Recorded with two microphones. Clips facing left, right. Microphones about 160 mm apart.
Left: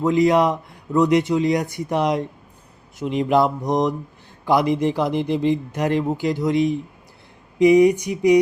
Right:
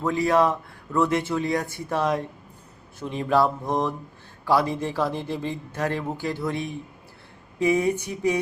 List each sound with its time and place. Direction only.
0.0 s speech: 20° left (ahead or behind)